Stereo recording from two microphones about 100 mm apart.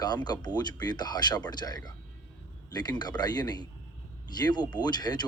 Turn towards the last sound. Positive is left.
turn(degrees=45)  # may be behind; listen again after turning